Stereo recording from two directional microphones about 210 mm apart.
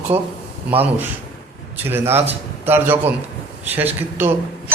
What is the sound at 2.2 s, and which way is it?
Speech, 30° right (ahead or behind).